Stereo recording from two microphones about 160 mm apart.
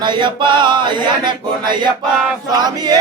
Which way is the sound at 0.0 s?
30° right (ahead or behind).